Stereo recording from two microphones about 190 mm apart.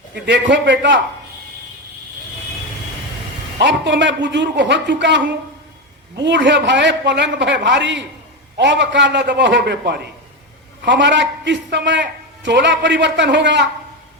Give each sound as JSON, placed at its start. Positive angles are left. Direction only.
{"t": 0.1, "sound": "a man's voice", "side_deg": -70}
{"t": 3.6, "sound": "a man's voice", "side_deg": -70}